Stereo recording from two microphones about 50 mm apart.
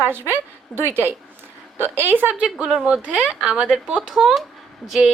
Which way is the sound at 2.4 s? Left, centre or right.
Centre.